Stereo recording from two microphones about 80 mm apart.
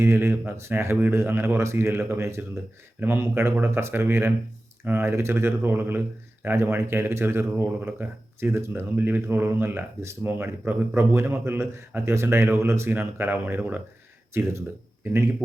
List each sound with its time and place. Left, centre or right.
0.0 s speech: right
14.3 s speech: right